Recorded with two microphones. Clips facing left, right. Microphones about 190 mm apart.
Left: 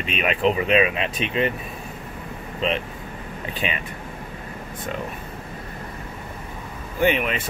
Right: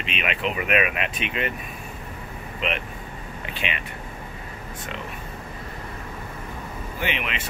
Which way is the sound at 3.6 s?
40° left (ahead or behind).